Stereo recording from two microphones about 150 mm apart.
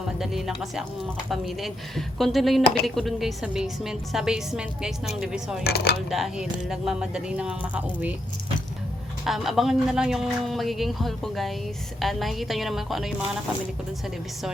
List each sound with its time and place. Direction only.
0.2 s speech: centre (ahead or behind)
5.6 s speech: 90° left
6.1 s speech: centre (ahead or behind)
9.2 s speech: centre (ahead or behind)